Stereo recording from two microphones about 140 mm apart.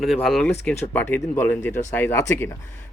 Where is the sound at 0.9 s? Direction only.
10° left (ahead or behind).